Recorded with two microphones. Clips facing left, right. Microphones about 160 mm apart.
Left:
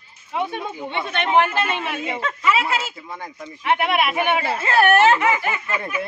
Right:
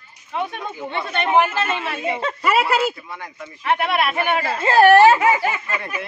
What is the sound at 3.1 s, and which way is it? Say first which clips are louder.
Speech: even; 20° left (ahead or behind).